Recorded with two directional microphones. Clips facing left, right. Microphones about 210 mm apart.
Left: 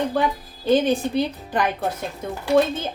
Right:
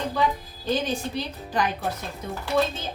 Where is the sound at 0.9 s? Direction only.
55° left (ahead or behind).